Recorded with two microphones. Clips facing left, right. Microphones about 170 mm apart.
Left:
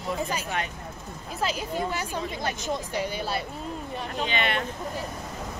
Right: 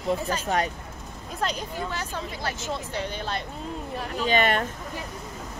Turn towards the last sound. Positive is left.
turn(degrees=-45)  # may be behind; listen again after turning